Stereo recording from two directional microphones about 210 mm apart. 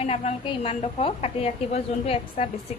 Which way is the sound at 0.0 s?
30° left (ahead or behind).